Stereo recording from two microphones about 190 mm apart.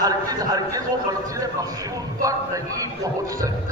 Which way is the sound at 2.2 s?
15° right (ahead or behind).